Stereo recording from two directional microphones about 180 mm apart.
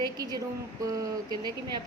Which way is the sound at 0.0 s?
20° right (ahead or behind).